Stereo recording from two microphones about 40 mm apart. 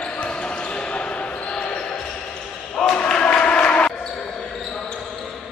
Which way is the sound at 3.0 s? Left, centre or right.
Left.